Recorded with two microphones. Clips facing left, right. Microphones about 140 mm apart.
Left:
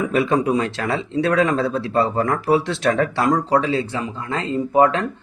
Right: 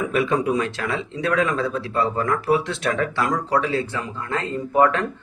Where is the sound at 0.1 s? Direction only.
30° left (ahead or behind).